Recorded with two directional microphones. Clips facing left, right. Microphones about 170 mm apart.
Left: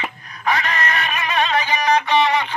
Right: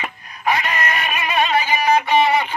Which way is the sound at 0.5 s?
15° right (ahead or behind).